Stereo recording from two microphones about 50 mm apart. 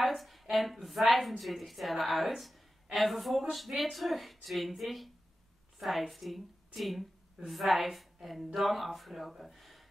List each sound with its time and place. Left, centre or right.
0.0 s a woman's voice: centre